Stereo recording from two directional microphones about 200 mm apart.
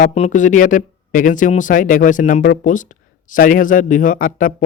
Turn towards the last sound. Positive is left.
turn(degrees=40)  # may be behind; listen again after turning